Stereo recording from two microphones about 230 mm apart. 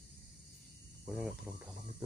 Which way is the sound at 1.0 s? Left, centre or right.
Centre.